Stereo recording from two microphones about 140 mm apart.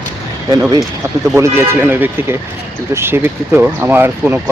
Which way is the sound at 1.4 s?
15° right (ahead or behind).